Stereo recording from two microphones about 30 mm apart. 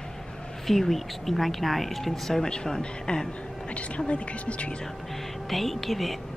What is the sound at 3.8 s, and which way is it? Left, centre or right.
Speech, left.